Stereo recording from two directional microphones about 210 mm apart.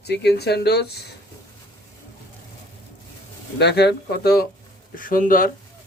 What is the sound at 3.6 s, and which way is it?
Speech, 50° left (ahead or behind).